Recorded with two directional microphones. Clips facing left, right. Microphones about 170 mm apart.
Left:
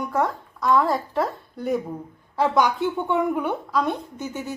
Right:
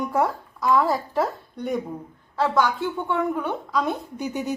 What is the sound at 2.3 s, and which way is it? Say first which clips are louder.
Speech: left 1 dB; 15° left (ahead or behind).